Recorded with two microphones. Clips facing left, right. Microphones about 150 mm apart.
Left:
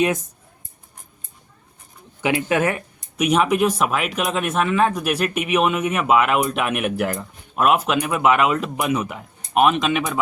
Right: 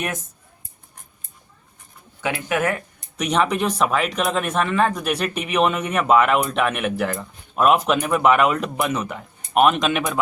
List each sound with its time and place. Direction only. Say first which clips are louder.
2.2 s speech: left 3 dB; 25° left (ahead or behind)
2.7 s speech: left 3 dB; 10° left (ahead or behind)